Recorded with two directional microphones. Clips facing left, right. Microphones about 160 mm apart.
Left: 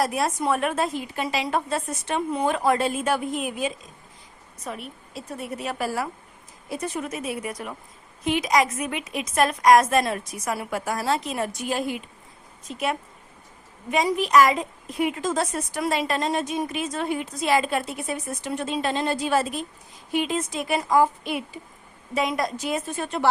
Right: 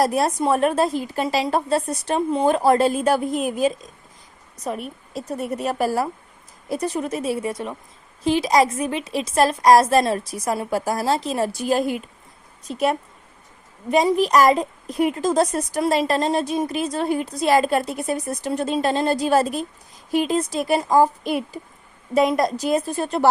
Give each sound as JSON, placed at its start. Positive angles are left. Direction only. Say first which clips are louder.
{"t": 0.0, "sound": "a woman's voice", "louder": "right 5 dB", "side_deg": -35}